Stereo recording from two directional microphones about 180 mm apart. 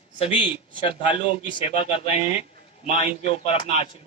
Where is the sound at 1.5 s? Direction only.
30° left (ahead or behind).